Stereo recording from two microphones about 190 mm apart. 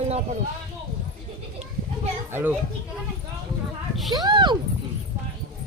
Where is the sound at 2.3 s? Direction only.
10° right (ahead or behind).